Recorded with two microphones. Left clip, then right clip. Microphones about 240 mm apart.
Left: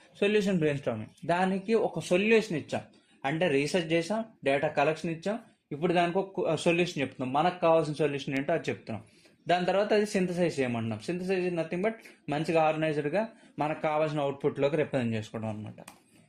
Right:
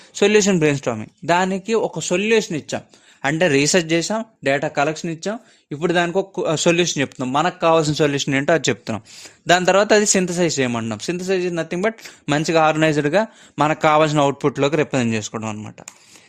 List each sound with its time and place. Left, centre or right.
0.1 s a man's voice: right